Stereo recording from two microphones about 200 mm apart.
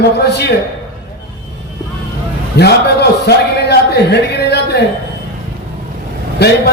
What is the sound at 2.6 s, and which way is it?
A man's voice, 55° left (ahead or behind).